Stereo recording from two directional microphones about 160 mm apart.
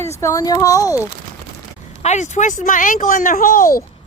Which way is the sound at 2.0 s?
50° left (ahead or behind).